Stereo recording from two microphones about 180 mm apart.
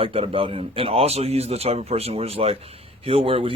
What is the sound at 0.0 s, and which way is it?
A man's voice, 30° right (ahead or behind).